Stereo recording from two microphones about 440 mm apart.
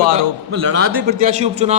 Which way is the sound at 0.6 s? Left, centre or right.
Right.